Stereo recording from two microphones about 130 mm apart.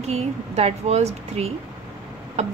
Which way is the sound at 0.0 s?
55° right (ahead or behind).